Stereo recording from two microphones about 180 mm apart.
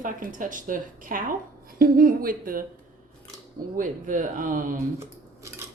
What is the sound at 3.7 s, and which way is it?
Speech, 50° right (ahead or behind).